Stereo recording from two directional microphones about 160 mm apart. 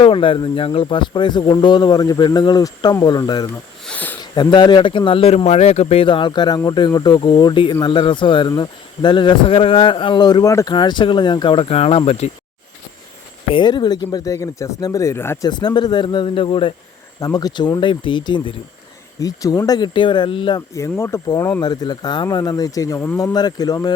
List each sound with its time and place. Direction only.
0.0 s speech: 35° left (ahead or behind)
3.8 s sniff: 10° left (ahead or behind)
4.2 s a man's voice: 25° left (ahead or behind)
13.5 s speech: 30° left (ahead or behind)
15.4 s speech: 25° left (ahead or behind)